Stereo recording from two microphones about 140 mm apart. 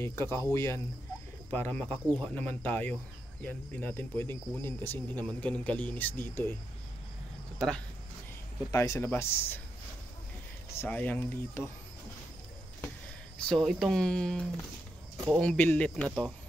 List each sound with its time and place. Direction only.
0.0 s speech: 20° left (ahead or behind)
7.5 s speech: 5° left (ahead or behind)
8.7 s speech: 20° left (ahead or behind)
10.8 s speech: 10° left (ahead or behind)
13.5 s speech: centre (ahead or behind)
15.4 s speech: 10° left (ahead or behind)